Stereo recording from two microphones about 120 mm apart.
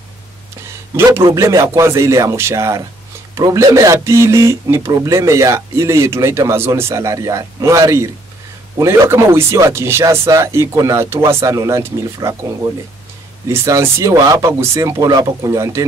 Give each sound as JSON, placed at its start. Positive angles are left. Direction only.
{"t": 0.7, "sound": "speech", "side_deg": -25}
{"t": 13.5, "sound": "speech", "side_deg": -25}